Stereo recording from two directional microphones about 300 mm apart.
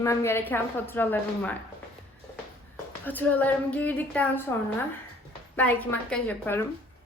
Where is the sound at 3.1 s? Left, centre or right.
Centre.